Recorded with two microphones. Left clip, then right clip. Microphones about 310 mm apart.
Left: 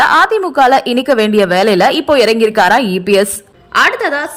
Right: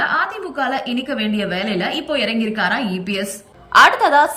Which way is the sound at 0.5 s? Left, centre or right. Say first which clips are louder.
Left 12 dB; centre.